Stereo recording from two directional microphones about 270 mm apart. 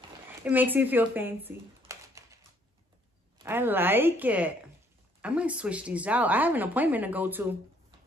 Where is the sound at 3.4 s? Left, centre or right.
Centre.